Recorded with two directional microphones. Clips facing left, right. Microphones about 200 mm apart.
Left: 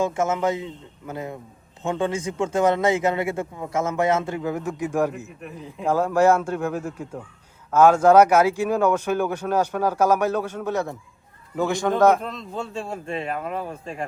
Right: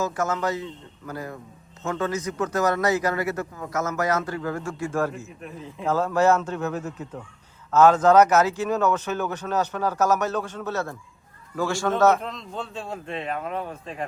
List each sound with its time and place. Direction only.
0.0 s a man's voice: 25° left (ahead or behind); by 14.1 s centre (ahead or behind)